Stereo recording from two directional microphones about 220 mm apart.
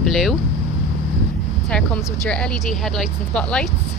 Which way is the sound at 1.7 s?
5° left (ahead or behind).